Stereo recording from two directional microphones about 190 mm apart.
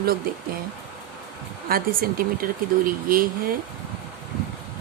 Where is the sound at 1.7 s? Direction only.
50° right (ahead or behind).